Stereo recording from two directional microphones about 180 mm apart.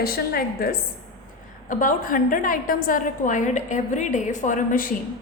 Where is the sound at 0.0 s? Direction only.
55° left (ahead or behind).